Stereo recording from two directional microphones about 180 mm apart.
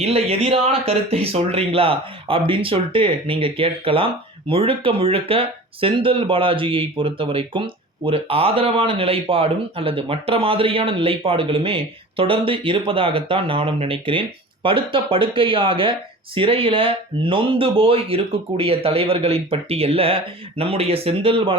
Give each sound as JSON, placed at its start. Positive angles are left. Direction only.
{"t": 0.0, "sound": "speech", "side_deg": -35}